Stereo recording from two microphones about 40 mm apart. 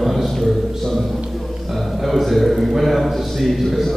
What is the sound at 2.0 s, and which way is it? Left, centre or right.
A man's voice, centre.